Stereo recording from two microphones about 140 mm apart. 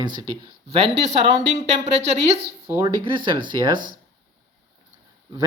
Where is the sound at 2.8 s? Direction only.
35° right (ahead or behind).